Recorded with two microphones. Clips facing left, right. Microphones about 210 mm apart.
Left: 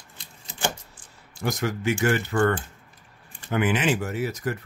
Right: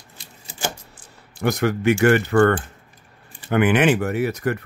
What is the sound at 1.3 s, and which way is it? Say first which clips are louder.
Speech: right 6 dB; 65° right (ahead or behind).